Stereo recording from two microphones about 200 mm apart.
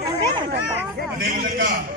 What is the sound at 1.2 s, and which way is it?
Speech, 45° right (ahead or behind).